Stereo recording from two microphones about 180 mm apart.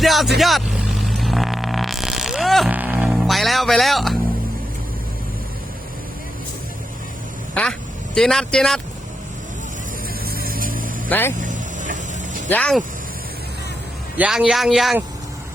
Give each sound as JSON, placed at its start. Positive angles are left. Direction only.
{"t": 0.0, "sound": "speech", "side_deg": 0}
{"t": 0.3, "sound": "vehicle", "side_deg": 0}
{"t": 7.5, "sound": "speech", "side_deg": 5}
{"t": 10.2, "sound": "vehicle", "side_deg": -55}
{"t": 11.1, "sound": "speech", "side_deg": 10}
{"t": 11.3, "sound": "vehicle", "side_deg": -45}
{"t": 12.5, "sound": "speech", "side_deg": 5}
{"t": 14.2, "sound": "speech", "side_deg": -5}